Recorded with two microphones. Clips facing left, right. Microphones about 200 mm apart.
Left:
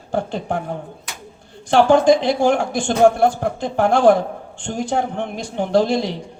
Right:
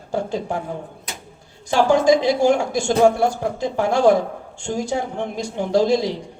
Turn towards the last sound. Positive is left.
turn(degrees=55)  # may be behind; listen again after turning